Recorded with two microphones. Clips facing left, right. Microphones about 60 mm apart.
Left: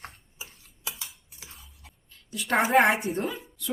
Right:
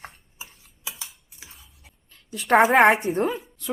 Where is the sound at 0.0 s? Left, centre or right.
Centre.